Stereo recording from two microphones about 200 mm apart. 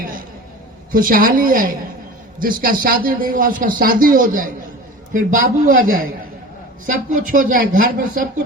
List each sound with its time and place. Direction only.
0.9 s speech: 45° right (ahead or behind)